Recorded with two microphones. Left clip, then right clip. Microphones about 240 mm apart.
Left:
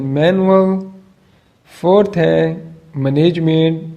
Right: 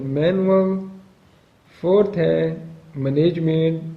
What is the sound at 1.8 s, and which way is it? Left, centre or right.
Speech, left.